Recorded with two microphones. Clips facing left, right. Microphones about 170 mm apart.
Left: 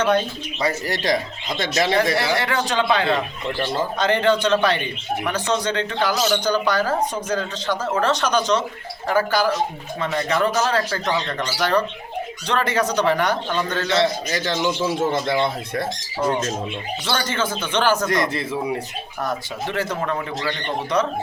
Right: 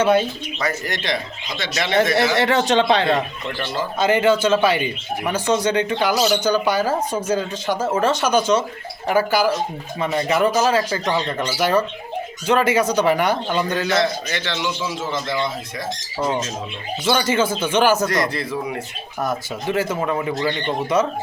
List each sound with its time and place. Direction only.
0.0 s a man's voice: 10° right (ahead or behind)
0.6 s a man's voice: 35° left (ahead or behind)
2.1 s speech: 25° right (ahead or behind)
3.9 s a man's voice: 10° right (ahead or behind)
13.9 s a man's voice: 30° left (ahead or behind); by 15.9 s 60° left (ahead or behind)
17.1 s a man's voice: 10° right (ahead or behind)
18.1 s a man's voice: 25° left (ahead or behind)
19.7 s a man's voice: 10° right (ahead or behind)